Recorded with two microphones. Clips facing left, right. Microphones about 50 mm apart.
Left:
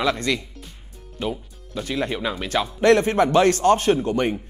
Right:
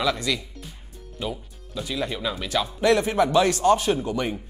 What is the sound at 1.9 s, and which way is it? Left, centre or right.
A man's voice, left.